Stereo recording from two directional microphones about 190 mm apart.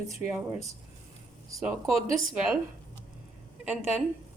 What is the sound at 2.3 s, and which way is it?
Speech, 5° right (ahead or behind).